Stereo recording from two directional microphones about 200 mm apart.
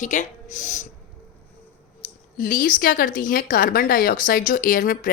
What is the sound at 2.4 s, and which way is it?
Speech, 45° left (ahead or behind).